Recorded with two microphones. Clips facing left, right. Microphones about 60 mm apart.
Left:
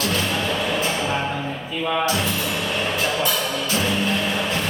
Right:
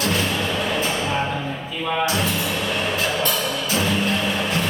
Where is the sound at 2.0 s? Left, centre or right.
Centre.